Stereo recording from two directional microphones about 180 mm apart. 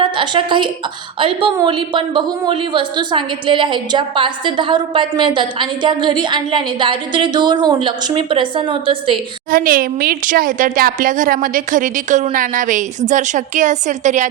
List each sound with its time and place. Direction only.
0.0 s a woman's voice: 25° right (ahead or behind)
9.5 s a woman's voice: 50° right (ahead or behind)